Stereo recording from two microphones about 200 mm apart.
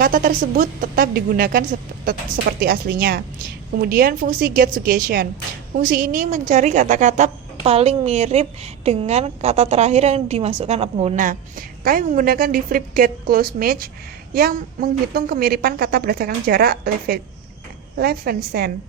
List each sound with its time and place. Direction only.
0.0 s a woman's voice: 45° right (ahead or behind)